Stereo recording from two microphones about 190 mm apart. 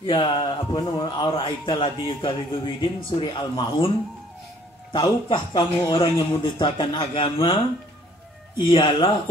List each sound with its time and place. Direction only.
0.0 s a man's voice: 25° left (ahead or behind)
4.9 s a man's voice: 25° left (ahead or behind)
8.6 s a man's voice: 25° left (ahead or behind)